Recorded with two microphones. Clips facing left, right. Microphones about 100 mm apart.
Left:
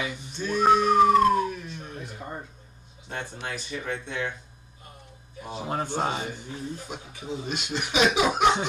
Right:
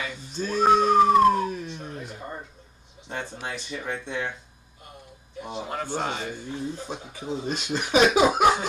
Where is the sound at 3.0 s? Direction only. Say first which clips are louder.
Right 1 dB; 20° right (ahead or behind).